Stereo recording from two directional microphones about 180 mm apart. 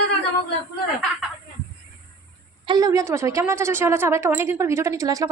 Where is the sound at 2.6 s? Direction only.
25° right (ahead or behind).